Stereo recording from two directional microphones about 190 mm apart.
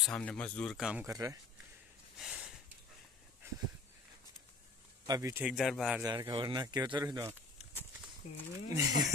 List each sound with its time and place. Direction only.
0.0 s speech: 5° left (ahead or behind)
1.0 s speech: 15° right (ahead or behind)
2.1 s a sound: 5° right (ahead or behind)
5.0 s speech: 20° right (ahead or behind)
5.4 s speech: centre (ahead or behind)
6.0 s speech: 20° right (ahead or behind)
8.2 s speech: 35° left (ahead or behind)
8.6 s speech: 15° right (ahead or behind)